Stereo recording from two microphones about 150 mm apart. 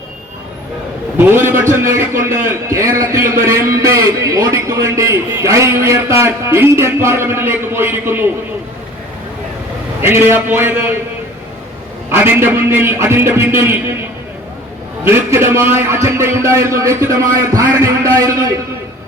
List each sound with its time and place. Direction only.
1.2 s a man's voice: 15° right (ahead or behind)
10.0 s a man's voice: 15° right (ahead or behind)
12.1 s a man's voice: 15° right (ahead or behind)
15.1 s a man's voice: 15° right (ahead or behind)